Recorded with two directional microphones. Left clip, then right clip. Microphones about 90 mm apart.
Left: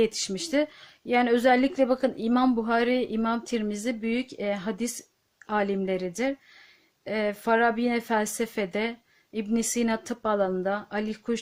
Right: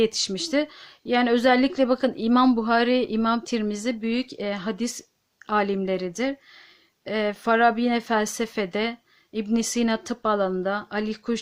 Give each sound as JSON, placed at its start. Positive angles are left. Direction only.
{"t": 0.0, "sound": "speech", "side_deg": -35}